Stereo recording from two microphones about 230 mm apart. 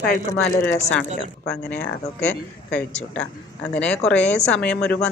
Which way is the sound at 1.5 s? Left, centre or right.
Centre.